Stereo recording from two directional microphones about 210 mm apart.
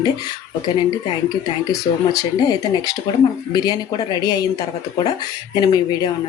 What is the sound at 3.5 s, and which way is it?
Speech, 20° left (ahead or behind).